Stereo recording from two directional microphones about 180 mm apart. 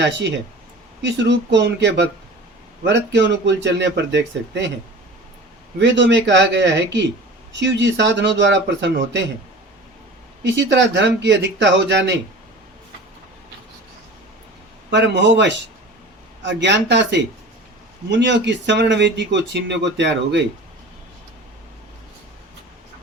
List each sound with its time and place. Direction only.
0.0 s speech: 75° right (ahead or behind)
5.8 s speech: 75° right (ahead or behind)
10.4 s speech: 85° right
14.8 s speech: 75° right (ahead or behind)